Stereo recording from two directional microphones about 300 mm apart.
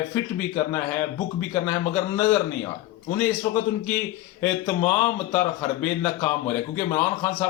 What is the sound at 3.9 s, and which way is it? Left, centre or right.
Speech, centre.